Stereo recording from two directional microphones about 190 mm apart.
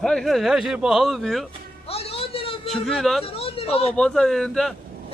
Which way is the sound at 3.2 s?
30° left (ahead or behind).